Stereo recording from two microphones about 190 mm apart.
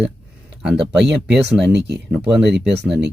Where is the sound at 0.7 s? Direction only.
65° right (ahead or behind).